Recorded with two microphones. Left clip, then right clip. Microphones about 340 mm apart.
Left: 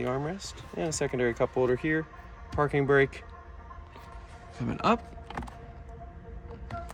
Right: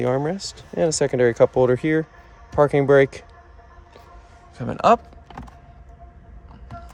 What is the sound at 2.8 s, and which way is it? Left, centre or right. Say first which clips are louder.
Speech: right 7 dB; right.